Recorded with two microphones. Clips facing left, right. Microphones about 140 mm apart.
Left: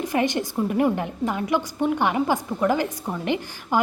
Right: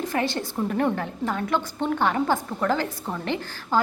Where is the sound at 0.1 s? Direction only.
15° left (ahead or behind).